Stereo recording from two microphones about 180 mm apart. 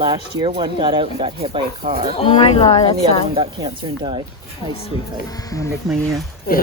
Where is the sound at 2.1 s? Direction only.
30° left (ahead or behind).